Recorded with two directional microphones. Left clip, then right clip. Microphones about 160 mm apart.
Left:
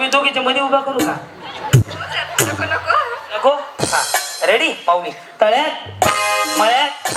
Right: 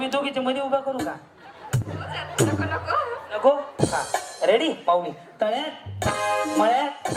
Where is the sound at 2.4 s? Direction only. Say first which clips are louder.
Left 7 dB; 25° left (ahead or behind).